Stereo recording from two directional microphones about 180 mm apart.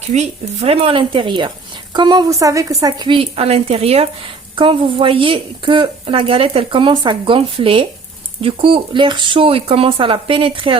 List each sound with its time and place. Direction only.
0.1 s a woman's voice: 35° right (ahead or behind)